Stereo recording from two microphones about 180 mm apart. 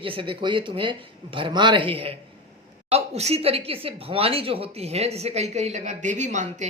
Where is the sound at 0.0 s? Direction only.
30° right (ahead or behind).